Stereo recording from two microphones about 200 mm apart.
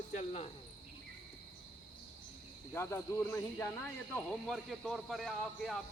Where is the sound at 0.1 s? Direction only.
30° left (ahead or behind).